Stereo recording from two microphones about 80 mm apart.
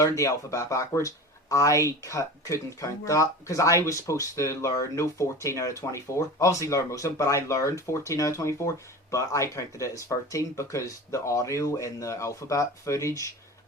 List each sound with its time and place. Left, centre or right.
0.0 s speech: left